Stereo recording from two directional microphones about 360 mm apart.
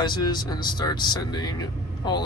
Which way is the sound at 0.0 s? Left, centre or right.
Centre.